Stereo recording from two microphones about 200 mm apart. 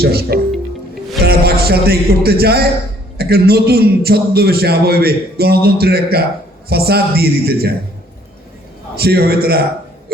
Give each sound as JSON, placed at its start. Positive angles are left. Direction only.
{"t": 0.0, "sound": "a man's voice", "side_deg": -50}
{"t": 9.0, "sound": "a man's voice", "side_deg": -50}